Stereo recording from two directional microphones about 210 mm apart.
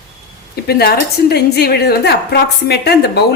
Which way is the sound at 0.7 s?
50° left (ahead or behind).